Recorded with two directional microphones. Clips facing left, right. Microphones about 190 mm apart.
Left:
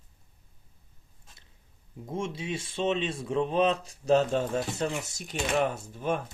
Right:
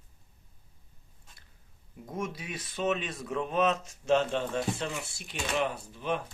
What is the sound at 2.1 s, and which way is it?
Speech, 25° left (ahead or behind).